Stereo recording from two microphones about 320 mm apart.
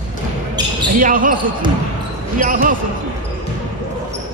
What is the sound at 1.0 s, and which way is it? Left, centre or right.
Basketball bounce, right.